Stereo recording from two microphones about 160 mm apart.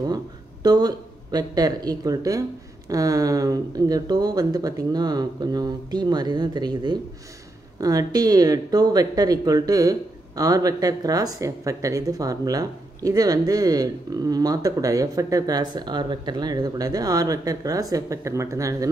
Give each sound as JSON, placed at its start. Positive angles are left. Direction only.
{"t": 0.1, "sound": "speech", "side_deg": -25}